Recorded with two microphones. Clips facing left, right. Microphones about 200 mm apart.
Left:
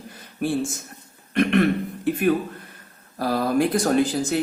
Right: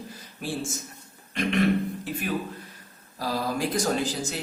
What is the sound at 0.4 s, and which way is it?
Speech, 60° left (ahead or behind).